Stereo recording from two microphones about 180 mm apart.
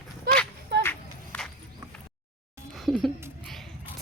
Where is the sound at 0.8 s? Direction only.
10° left (ahead or behind).